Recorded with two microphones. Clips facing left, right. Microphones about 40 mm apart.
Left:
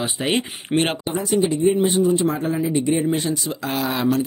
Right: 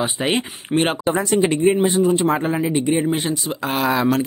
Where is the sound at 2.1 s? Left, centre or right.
Right.